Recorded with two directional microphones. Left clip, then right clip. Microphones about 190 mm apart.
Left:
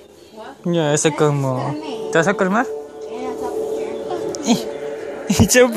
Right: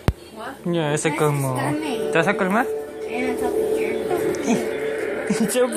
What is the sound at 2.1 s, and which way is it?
Speech, 45° left (ahead or behind).